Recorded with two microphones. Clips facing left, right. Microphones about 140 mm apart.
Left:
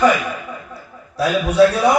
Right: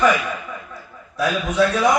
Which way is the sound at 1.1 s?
35° left (ahead or behind).